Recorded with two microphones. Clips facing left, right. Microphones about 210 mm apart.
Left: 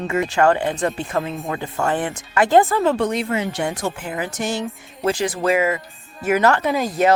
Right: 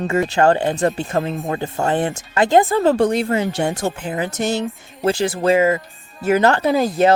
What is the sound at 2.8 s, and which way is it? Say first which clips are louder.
Speech: right 4 dB; 35° right (ahead or behind).